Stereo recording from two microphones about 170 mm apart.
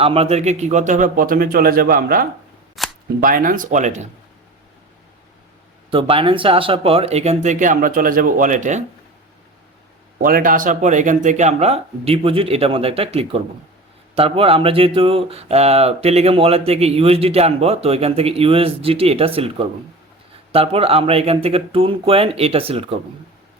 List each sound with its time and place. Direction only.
0.0 s a man's voice: 35° right (ahead or behind); by 2.2 s 60° right (ahead or behind)
2.8 s cap gun: centre (ahead or behind)
3.2 s speech: 55° right (ahead or behind)
5.9 s speech: 30° right (ahead or behind); by 8.8 s 50° right (ahead or behind)
10.2 s speech: 55° right (ahead or behind); by 23.0 s 35° right (ahead or behind)